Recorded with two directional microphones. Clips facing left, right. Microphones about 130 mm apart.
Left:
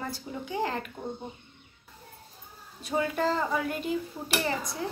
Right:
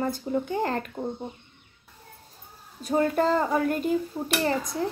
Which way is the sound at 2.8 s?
45° right (ahead or behind).